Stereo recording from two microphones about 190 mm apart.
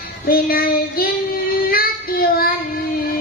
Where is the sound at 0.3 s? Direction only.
50° left (ahead or behind).